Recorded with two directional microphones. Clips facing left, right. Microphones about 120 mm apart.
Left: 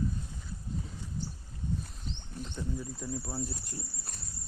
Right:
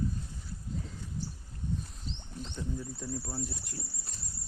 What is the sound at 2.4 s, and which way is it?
Bird, 10° left (ahead or behind).